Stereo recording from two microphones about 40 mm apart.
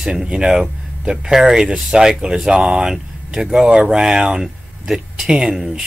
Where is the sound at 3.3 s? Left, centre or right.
Centre.